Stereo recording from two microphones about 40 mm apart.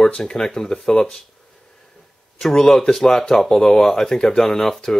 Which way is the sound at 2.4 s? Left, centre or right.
Centre.